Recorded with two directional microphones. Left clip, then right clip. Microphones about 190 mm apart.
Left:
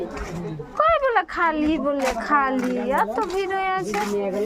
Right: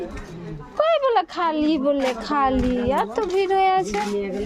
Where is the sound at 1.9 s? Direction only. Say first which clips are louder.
Left 1 dB; 20° right (ahead or behind).